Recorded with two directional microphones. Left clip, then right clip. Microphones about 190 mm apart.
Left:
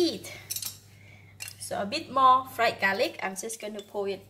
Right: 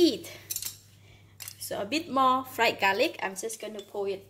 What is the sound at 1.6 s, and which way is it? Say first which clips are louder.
Speech: even; 40° right (ahead or behind).